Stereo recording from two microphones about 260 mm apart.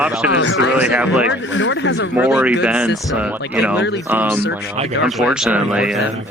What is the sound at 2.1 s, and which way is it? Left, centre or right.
Speech, centre.